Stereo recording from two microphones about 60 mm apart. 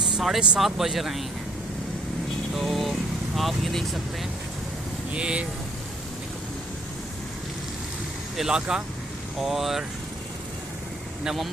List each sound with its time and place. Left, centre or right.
0.0 s vehicle: centre
0.6 s speech: centre
2.6 s speech: centre
5.1 s speech: centre
8.4 s speech: centre